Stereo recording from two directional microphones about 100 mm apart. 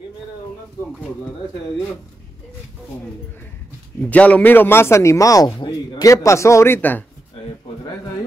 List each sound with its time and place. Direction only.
4.0 s speech: 15° left (ahead or behind)